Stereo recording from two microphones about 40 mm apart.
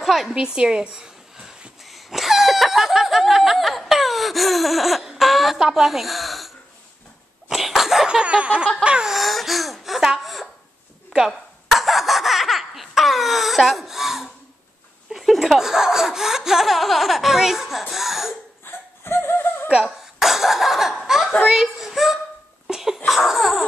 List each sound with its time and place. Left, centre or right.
0.0 s a woman's voice: centre
0.3 s speech: centre
1.9 s a sound: centre
5.6 s speech: centre
7.5 s a sound: centre
8.1 s snicker: right
9.2 s speech: centre
11.1 s a sound: centre
15.2 s speech: centre
18.6 s laughter: left
20.2 s laughter: centre
21.5 s a sound: centre
22.7 s sneeze: centre
23.0 s laughter: centre